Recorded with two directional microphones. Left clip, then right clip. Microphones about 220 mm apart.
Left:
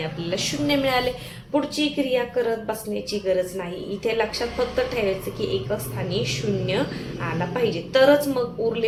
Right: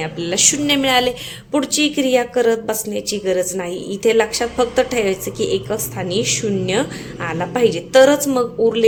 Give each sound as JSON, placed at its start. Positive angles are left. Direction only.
{"t": 0.0, "sound": "speech", "side_deg": -55}